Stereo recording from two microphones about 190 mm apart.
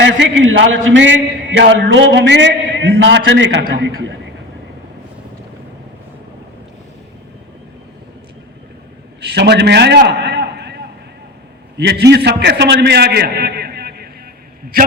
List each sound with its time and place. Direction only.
0.2 s a man's voice: 75° right (ahead or behind)
9.2 s a man's voice: 65° right (ahead or behind)